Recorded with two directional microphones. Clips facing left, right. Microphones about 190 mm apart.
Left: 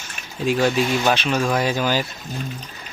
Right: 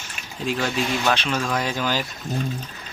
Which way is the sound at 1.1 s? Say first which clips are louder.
Left 3 dB; 10° left (ahead or behind).